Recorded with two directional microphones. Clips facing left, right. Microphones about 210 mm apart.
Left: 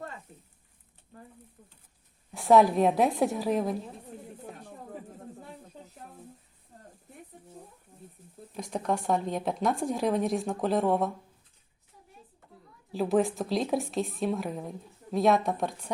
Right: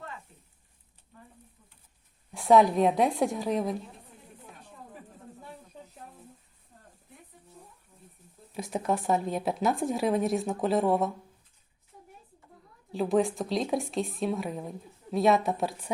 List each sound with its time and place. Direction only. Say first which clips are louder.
2.3 s a woman's voice: even; centre (ahead or behind)
4.1 s a sound: left 8 dB; 50° left (ahead or behind)
8.5 s a woman's voice: right 1 dB; 5° right (ahead or behind)
12.9 s a woman's voice: even; centre (ahead or behind)